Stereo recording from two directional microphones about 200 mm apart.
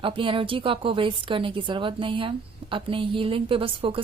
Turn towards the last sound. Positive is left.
turn(degrees=-25)  # may be behind; listen again after turning